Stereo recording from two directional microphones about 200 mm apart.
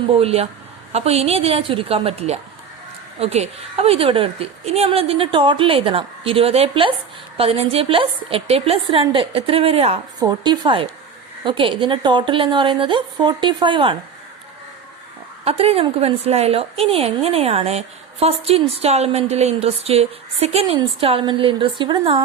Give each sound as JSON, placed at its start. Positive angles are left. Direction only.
{"t": 0.2, "sound": "a woman's voice", "side_deg": -30}
{"t": 15.4, "sound": "a woman's voice", "side_deg": -30}